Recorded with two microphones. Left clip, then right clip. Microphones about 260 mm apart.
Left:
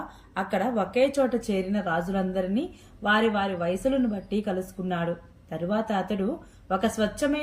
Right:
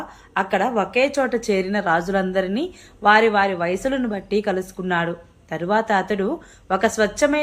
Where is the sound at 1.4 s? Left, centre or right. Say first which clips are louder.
Right 8 dB; right.